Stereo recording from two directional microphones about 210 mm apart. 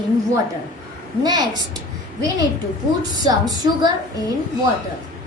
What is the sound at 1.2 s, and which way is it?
Speech, 20° right (ahead or behind).